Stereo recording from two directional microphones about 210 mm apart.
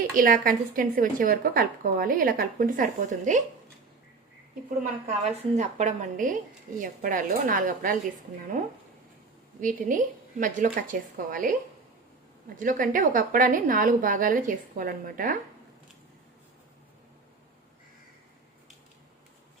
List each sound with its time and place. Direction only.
0.2 s speech: 40° right (ahead or behind)
5.0 s speech: 35° right (ahead or behind)
9.6 s speech: 40° right (ahead or behind)
12.5 s speech: 40° right (ahead or behind)